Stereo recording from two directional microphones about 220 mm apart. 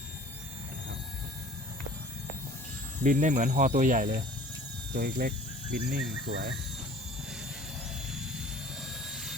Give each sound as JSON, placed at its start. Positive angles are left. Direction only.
{"t": 3.0, "sound": "speech", "side_deg": -35}
{"t": 8.8, "sound": "jet engine", "side_deg": 0}